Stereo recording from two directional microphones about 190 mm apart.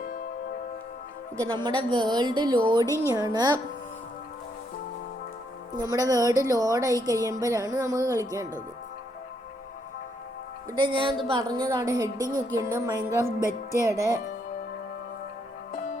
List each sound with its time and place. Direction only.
1.4 s a woman's voice: 25° right (ahead or behind)
5.7 s a woman's voice: 20° right (ahead or behind)
10.7 s a woman's voice: 25° right (ahead or behind)